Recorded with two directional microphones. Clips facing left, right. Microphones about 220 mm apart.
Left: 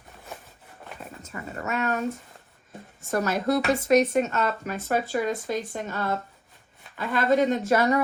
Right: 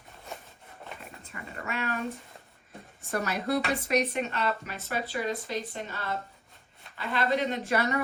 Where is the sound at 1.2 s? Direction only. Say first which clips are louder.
Left 6 dB; 45° left (ahead or behind).